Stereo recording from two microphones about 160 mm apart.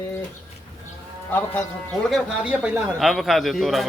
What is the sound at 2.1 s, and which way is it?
Speech, centre (ahead or behind).